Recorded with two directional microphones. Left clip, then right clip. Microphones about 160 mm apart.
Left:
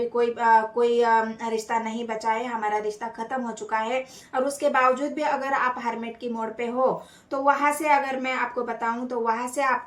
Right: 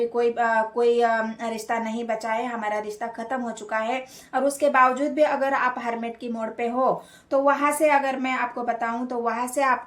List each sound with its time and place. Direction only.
0.2 s speech: 40° right (ahead or behind)